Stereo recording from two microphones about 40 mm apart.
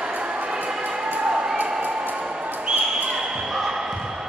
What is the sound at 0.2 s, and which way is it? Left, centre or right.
Music, right.